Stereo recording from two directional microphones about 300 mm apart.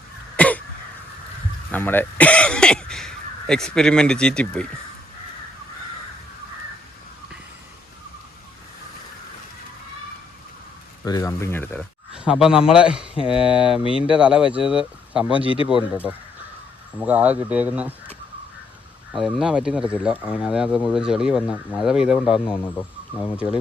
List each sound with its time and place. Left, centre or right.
0.3 s throat clearing: centre
1.7 s speech: centre
11.0 s speech: centre
13.1 s speech: centre
14.1 s speech: centre
15.3 s speech: centre
17.0 s speech: centre
19.1 s speech: centre
22.3 s speech: centre